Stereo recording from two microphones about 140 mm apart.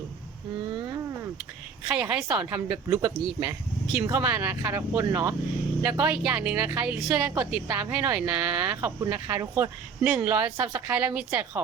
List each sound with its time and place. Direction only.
1.9 s speech: 10° right (ahead or behind)
2.9 s speech: 20° right (ahead or behind)